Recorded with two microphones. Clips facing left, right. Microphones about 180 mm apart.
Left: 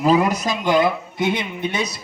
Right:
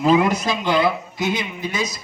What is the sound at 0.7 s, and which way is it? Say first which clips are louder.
Speech: left 1 dB; 50° left (ahead or behind).